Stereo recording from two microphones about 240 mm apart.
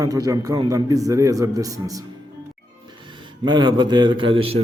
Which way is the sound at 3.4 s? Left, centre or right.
Centre.